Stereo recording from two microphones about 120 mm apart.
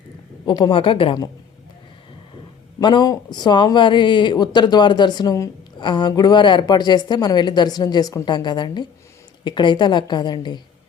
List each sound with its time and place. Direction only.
0.4 s a woman's voice: 40° left (ahead or behind)
2.8 s speech: 35° left (ahead or behind)